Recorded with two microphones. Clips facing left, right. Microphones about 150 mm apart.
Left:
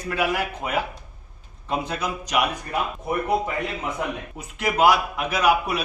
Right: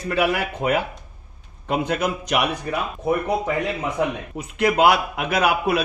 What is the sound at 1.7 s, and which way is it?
Speech, 60° right (ahead or behind).